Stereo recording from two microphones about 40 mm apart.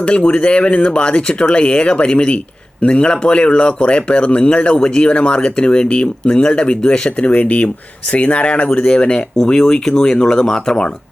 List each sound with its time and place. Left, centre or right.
0.0 s speech: left
7.3 s speech: left; by 10.9 s centre